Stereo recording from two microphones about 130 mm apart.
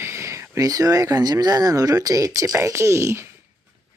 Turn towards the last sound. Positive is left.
turn(degrees=-20)  # may be behind; listen again after turning